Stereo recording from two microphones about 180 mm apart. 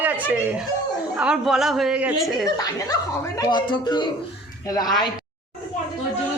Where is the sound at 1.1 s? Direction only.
5° right (ahead or behind).